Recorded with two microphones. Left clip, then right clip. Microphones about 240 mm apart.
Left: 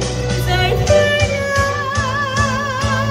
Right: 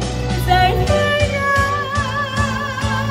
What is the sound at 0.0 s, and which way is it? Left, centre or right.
Music, left.